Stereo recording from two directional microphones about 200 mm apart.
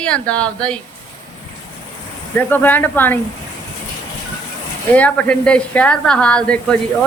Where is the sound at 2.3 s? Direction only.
10° left (ahead or behind).